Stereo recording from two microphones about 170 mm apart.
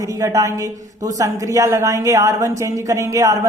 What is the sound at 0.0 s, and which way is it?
A man's voice, 20° right (ahead or behind).